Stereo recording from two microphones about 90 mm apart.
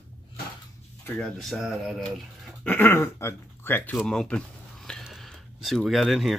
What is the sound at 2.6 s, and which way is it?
Speech, 20° left (ahead or behind).